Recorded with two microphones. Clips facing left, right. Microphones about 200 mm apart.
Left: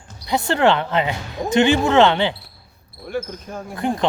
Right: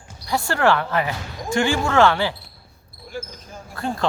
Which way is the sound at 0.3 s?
20° left (ahead or behind).